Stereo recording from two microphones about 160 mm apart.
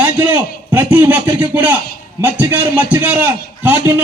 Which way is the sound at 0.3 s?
10° right (ahead or behind).